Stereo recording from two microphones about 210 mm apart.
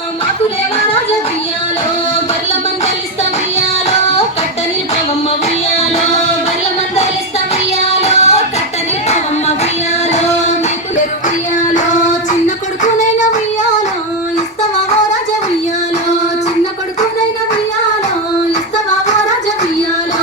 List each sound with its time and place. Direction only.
8.0 s music: 30° left (ahead or behind)
11.5 s music: 35° left (ahead or behind)
12.8 s child singing: 35° left (ahead or behind)